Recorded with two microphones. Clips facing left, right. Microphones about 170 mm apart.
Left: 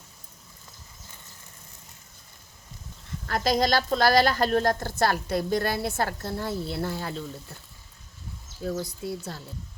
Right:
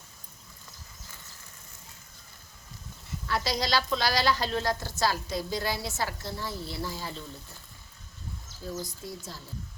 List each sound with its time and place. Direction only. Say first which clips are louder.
3.2 s a woman's voice: left 6 dB; 50° left (ahead or behind)
8.8 s speech: left 6 dB; 65° left (ahead or behind)